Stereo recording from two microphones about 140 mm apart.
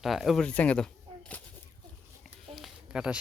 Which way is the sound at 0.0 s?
Centre (ahead or behind).